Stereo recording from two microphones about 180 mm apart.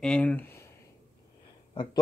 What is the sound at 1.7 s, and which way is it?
Speech, 25° left (ahead or behind).